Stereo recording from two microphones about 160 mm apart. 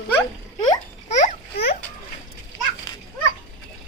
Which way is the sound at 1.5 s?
80° left.